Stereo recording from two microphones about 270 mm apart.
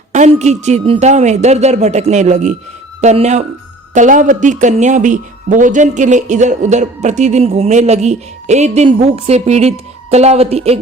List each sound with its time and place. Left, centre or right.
0.1 s speech: right